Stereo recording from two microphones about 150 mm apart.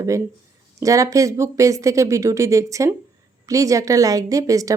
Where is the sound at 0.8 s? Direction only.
20° right (ahead or behind).